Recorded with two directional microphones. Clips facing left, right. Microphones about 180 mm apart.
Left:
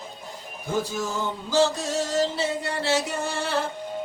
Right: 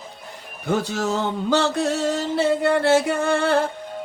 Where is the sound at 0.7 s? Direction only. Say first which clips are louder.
Right 5 dB; 70° right (ahead or behind); by 3.7 s 55° right (ahead or behind).